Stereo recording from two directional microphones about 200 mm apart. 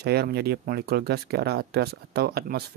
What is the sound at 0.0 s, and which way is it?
Speech, 55° right (ahead or behind).